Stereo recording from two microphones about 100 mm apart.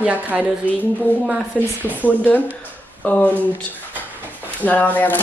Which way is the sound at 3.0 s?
15° left (ahead or behind).